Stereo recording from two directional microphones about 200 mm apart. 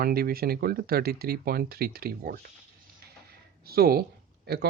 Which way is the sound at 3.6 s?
50° right (ahead or behind).